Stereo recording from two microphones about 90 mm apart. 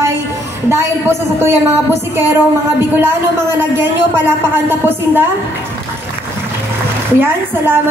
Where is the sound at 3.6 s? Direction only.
25° right (ahead or behind).